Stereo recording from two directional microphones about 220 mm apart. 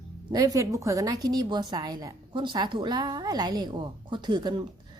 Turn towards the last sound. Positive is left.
turn(degrees=-20)  # may be behind; listen again after turning